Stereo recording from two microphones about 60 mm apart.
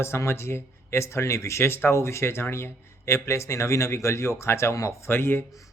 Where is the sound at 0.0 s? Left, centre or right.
Left.